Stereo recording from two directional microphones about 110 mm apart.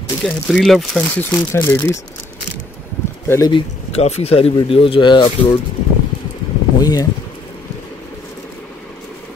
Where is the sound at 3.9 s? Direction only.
75° left (ahead or behind); by 5.3 s 45° left (ahead or behind).